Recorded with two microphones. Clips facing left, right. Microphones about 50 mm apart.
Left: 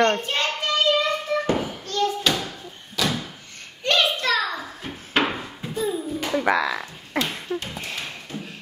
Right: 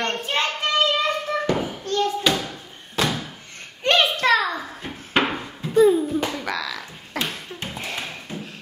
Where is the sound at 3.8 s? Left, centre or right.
Right.